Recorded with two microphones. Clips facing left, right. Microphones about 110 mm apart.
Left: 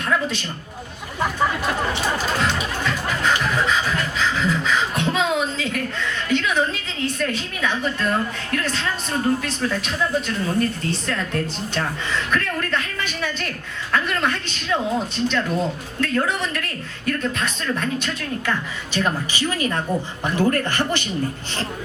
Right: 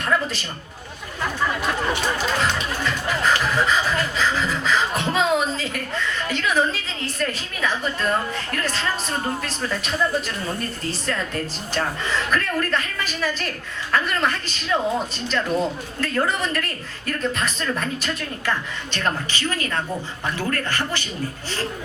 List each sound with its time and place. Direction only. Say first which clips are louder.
0.0 s a man's voice: even; centre (ahead or behind)
2.4 s beatboxing: left 1 dB; centre (ahead or behind)
18.9 s a woman's voice: left 3 dB; 10° left (ahead or behind)